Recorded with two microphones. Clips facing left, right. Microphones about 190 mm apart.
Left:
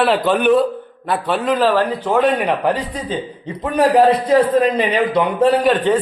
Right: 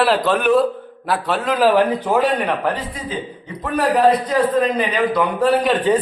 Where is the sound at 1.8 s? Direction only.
15° right (ahead or behind).